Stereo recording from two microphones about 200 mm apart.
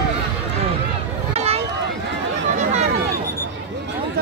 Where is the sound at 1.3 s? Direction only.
30° right (ahead or behind).